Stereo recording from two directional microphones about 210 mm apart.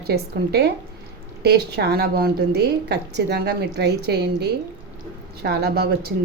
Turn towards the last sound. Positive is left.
turn(degrees=-50)  # may be behind; listen again after turning